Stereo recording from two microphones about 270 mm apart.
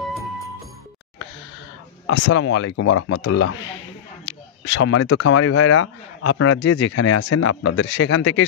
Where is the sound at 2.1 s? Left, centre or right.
Left.